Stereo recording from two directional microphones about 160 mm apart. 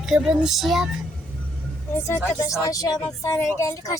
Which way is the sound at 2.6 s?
20° left (ahead or behind).